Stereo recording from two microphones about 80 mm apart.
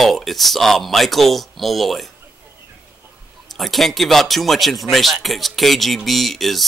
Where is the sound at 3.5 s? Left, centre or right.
Centre.